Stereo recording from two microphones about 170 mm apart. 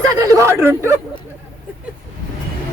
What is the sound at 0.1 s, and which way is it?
Speech, 20° right (ahead or behind).